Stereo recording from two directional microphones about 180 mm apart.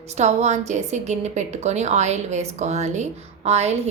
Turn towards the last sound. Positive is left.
turn(degrees=-35)  # may be behind; listen again after turning